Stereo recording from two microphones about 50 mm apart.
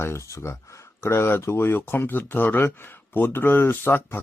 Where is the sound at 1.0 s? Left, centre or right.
Left.